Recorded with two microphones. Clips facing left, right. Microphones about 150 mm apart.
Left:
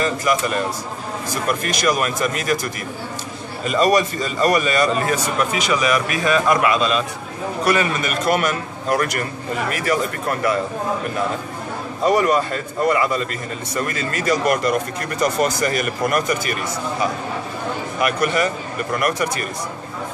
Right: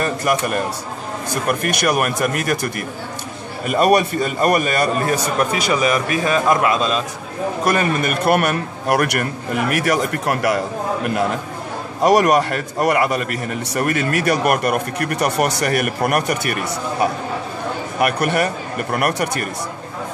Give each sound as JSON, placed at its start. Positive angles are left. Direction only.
{"t": 0.0, "sound": "speech", "side_deg": -55}
{"t": 5.1, "sound": "a man's voice", "side_deg": -35}
{"t": 7.6, "sound": "a man's voice", "side_deg": -45}
{"t": 12.0, "sound": "a man's voice", "side_deg": -80}
{"t": 17.9, "sound": "speech", "side_deg": -65}